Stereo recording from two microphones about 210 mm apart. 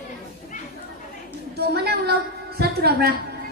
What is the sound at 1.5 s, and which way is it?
A woman's voice, 50° right (ahead or behind).